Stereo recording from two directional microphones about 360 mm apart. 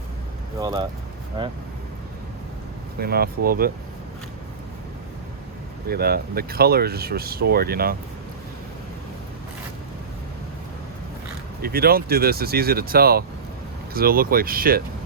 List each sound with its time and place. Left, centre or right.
0.6 s speech: centre
3.0 s speech: right
5.9 s speech: right
11.6 s speech: right